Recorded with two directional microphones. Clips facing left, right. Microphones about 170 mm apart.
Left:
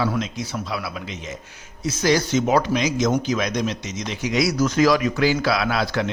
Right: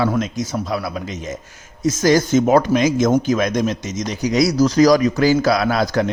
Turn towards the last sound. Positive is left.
turn(degrees=-45)  # may be behind; listen again after turning